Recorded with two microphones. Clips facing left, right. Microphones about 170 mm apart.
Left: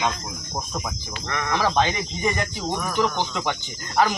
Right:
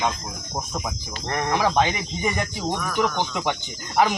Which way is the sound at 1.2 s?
35° right (ahead or behind).